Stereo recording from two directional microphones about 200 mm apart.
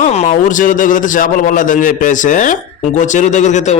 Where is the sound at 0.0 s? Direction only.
35° left (ahead or behind).